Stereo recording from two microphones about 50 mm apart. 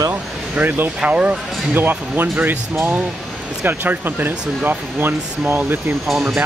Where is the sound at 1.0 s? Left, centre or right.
Right.